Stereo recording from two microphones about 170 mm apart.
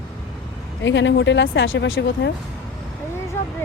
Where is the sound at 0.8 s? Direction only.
90° left.